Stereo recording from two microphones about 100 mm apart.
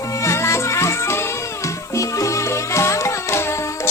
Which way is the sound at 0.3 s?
30° left (ahead or behind).